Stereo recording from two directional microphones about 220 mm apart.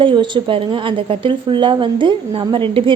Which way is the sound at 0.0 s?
20° right (ahead or behind).